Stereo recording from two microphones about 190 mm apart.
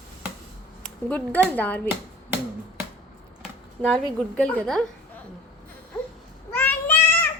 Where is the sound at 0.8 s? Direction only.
5° left (ahead or behind).